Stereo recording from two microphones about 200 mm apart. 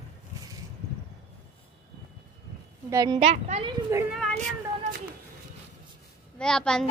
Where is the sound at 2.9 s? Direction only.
15° right (ahead or behind).